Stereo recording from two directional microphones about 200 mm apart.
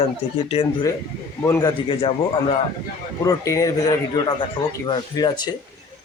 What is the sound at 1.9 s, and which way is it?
Speech, 25° left (ahead or behind).